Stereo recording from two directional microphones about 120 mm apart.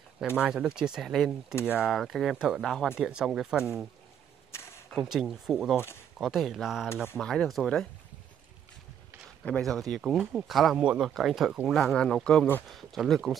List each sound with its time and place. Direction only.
0.4 s speech: 5° right (ahead or behind)
4.5 s a sound: 25° left (ahead or behind)
4.8 s speech: centre (ahead or behind)
9.4 s speech: 5° left (ahead or behind)